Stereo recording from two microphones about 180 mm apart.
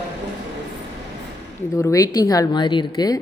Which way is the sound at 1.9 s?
20° left (ahead or behind).